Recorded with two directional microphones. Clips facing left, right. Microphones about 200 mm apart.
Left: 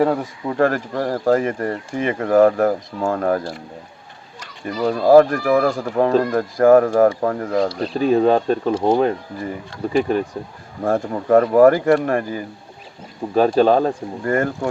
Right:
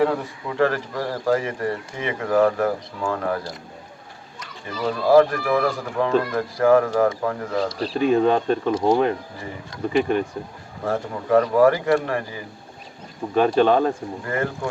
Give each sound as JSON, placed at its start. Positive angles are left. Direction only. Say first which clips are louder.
{"t": 0.0, "sound": "speech", "louder": "left 3 dB", "side_deg": 45}
{"t": 4.6, "sound": "speech", "louder": "left 5 dB", "side_deg": 45}
{"t": 10.8, "sound": "speech", "louder": "left 5 dB", "side_deg": 45}
{"t": 13.3, "sound": "speech", "louder": "left 3 dB", "side_deg": 35}